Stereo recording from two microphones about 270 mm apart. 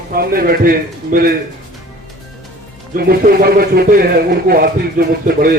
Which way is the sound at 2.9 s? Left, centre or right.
Right.